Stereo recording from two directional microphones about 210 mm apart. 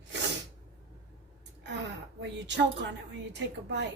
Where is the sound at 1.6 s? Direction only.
55° right (ahead or behind).